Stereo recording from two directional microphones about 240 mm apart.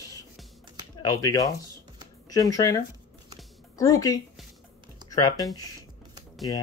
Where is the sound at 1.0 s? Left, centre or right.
Centre.